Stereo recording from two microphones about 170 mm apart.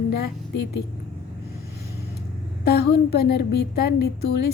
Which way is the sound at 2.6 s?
70° left (ahead or behind).